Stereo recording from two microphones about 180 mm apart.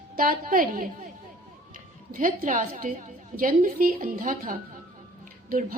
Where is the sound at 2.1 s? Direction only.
50° right (ahead or behind).